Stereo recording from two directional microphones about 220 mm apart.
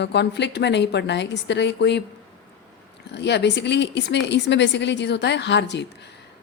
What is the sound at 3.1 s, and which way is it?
A woman's voice, 50° left (ahead or behind).